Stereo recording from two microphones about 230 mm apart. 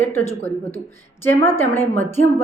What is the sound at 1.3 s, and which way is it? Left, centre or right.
Speech, centre.